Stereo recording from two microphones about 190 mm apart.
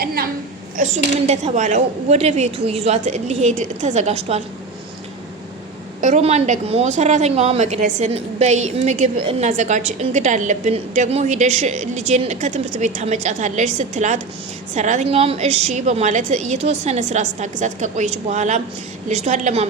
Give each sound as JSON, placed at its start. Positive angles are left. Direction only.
{"t": 0.0, "sound": "a sound", "side_deg": -55}
{"t": 0.8, "sound": "speech", "side_deg": -35}
{"t": 6.0, "sound": "speech", "side_deg": -40}